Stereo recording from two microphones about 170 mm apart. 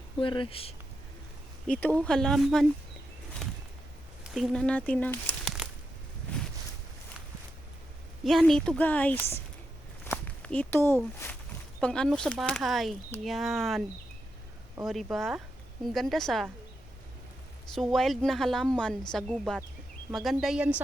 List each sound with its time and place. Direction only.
0.2 s speech: 30° left (ahead or behind)
1.6 s a woman's voice: 5° left (ahead or behind)
4.4 s a woman's voice: centre (ahead or behind)
8.2 s a woman's voice: centre (ahead or behind)
10.0 s walk: 10° left (ahead or behind)
11.8 s a woman's voice: 5° left (ahead or behind)
15.1 s a woman's voice: centre (ahead or behind)
17.7 s a woman's voice: centre (ahead or behind)